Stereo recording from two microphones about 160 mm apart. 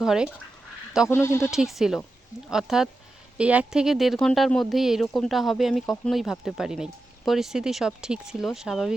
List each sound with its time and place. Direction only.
0.0 s speech: 5° right (ahead or behind)
1.0 s speech: 15° left (ahead or behind)
1.5 s speech: centre (ahead or behind)